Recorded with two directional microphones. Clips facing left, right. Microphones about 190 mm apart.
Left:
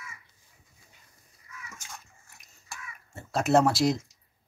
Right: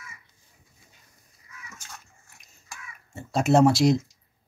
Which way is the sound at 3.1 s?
Centre (ahead or behind).